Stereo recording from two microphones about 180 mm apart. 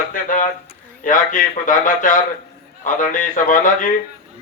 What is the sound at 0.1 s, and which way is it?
Speech, 45° left (ahead or behind).